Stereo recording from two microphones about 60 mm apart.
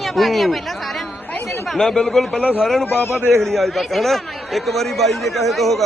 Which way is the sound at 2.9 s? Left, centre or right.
Left.